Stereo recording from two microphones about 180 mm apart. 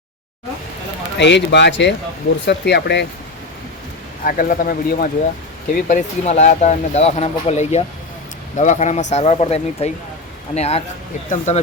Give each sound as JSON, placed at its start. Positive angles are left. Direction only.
{"t": 1.2, "sound": "speech", "side_deg": 75}
{"t": 4.2, "sound": "speech", "side_deg": 50}
{"t": 5.9, "sound": "speech", "side_deg": 40}